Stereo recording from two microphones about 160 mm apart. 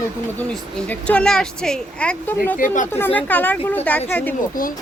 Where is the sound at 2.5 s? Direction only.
55° left (ahead or behind).